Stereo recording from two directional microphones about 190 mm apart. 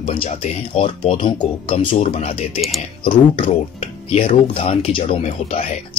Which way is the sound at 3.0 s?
25° left (ahead or behind).